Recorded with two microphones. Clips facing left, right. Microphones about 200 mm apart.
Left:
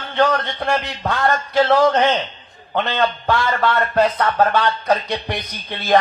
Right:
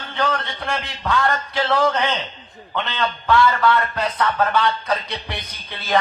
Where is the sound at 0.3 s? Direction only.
40° left (ahead or behind).